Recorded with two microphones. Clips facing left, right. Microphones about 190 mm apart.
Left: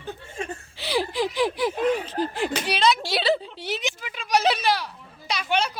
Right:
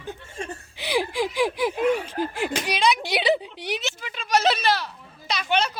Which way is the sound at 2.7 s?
15° right (ahead or behind).